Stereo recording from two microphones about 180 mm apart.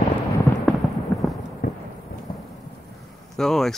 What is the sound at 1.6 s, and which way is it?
Thunder, 60° left (ahead or behind).